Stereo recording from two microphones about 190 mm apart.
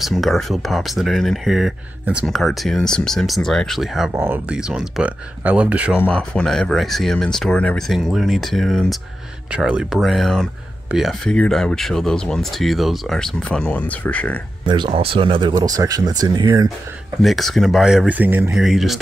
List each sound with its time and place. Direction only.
0.0 s speech: centre (ahead or behind)
4.1 s speech: 10° right (ahead or behind)
5.9 s speech: 5° left (ahead or behind)
14.7 s speech: 30° right (ahead or behind)
17.2 s speech: centre (ahead or behind)